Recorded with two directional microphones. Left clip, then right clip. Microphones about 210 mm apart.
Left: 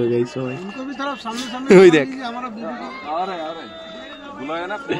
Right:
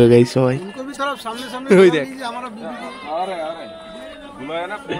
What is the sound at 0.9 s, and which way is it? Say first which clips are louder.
Speech: right 4 dB; 35° right (ahead or behind).